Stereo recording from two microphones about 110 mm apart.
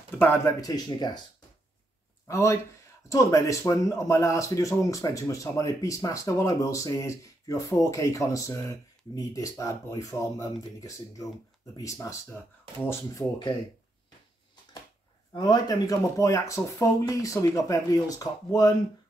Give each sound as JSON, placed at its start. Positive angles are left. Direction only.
{"t": 0.1, "sound": "speech", "side_deg": 20}
{"t": 0.6, "sound": "speech", "side_deg": 35}
{"t": 2.2, "sound": "speech", "side_deg": 25}
{"t": 15.3, "sound": "speech", "side_deg": 40}